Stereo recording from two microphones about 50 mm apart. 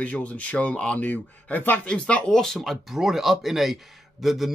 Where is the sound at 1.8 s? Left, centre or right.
Left.